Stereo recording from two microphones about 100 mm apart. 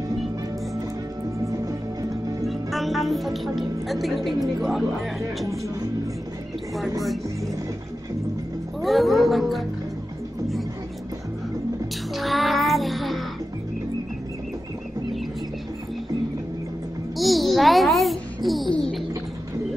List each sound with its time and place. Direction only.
1.5 s music: 35° right (ahead or behind)
2.4 s a woman's voice: centre (ahead or behind)
8.8 s speech: centre (ahead or behind)
12.1 s music: centre (ahead or behind)
17.2 s babbling: centre (ahead or behind)
18.7 s music: 5° left (ahead or behind)